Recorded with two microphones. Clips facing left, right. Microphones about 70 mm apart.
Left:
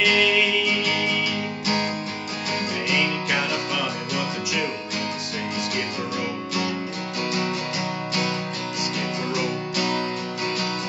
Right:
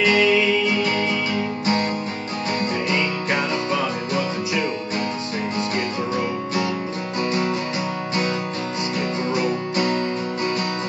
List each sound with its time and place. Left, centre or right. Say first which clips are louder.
0.0 s music: right 3 dB; right
2.9 s music: left 2 dB; right
9.3 s music: right 4 dB; right